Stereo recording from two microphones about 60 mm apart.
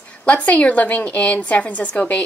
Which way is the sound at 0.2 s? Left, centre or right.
Left.